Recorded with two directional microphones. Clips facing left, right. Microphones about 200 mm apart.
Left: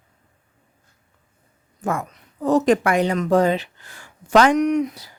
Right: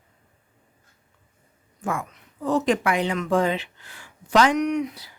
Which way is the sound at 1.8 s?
40° left (ahead or behind).